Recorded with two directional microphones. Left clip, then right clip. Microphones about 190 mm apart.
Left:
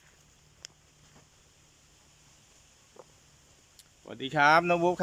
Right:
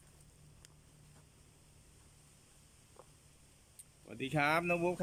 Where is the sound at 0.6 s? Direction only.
25° right (ahead or behind).